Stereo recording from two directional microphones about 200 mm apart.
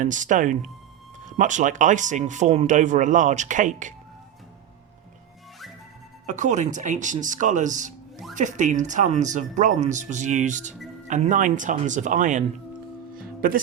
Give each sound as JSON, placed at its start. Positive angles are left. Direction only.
{"t": 0.0, "sound": "speech", "side_deg": -40}
{"t": 6.2, "sound": "speech", "side_deg": -35}